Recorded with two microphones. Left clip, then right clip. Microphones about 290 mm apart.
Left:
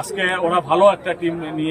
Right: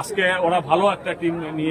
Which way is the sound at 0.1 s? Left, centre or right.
Centre.